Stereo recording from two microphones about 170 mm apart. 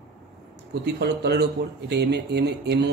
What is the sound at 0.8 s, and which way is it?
Speech, 75° right (ahead or behind).